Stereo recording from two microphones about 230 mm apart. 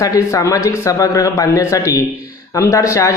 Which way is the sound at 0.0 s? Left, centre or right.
Centre.